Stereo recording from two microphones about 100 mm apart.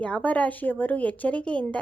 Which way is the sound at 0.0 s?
15° left (ahead or behind).